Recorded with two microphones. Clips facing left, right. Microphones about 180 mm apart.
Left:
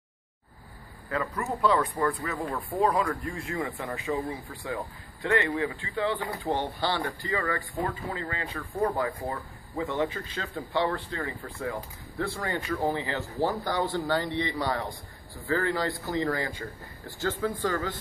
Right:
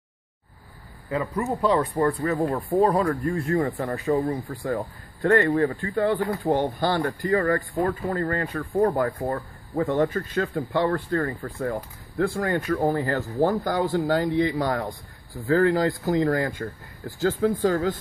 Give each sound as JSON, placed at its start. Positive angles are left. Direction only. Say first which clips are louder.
{"t": 1.1, "sound": "speech", "louder": "right 4 dB", "side_deg": -15}
{"t": 1.4, "sound": "speech", "louder": "right 3 dB", "side_deg": -35}